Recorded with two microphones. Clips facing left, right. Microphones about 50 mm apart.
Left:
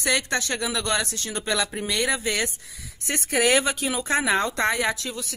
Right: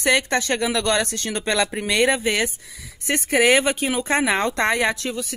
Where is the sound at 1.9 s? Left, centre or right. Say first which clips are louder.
Right 7 dB; right.